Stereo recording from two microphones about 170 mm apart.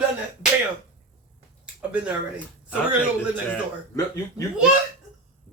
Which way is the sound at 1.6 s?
5° right (ahead or behind).